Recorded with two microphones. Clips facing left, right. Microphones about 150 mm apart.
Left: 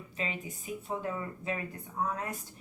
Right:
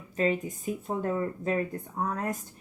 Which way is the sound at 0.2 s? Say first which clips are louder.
Right 11 dB; 45° right (ahead or behind).